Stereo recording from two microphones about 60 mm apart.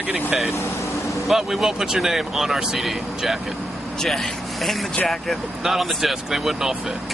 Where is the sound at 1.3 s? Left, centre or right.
Centre.